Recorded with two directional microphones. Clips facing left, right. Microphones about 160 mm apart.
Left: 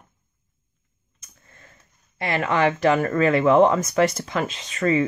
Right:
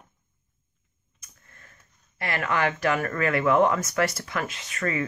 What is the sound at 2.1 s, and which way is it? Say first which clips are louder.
Speech: left 5 dB; 20° left (ahead or behind).